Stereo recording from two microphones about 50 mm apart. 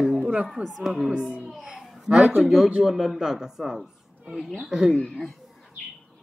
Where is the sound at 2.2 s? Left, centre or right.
Right.